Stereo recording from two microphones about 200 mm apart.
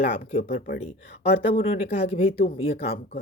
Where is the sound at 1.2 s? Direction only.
30° left (ahead or behind).